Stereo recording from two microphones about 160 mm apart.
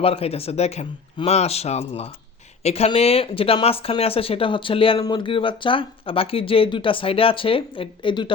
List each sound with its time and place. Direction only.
0.0 s speech: 40° left (ahead or behind)